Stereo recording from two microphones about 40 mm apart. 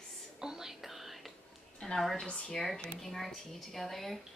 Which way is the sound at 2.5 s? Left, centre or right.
Centre.